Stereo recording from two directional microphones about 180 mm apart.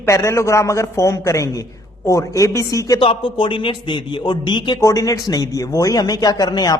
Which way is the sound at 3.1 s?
30° left (ahead or behind).